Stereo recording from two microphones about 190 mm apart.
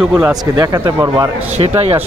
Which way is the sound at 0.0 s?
5° right (ahead or behind).